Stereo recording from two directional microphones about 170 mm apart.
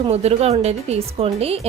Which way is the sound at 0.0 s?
40° right (ahead or behind).